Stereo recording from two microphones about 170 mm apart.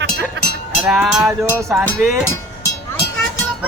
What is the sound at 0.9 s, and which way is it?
Speech, 5° right (ahead or behind).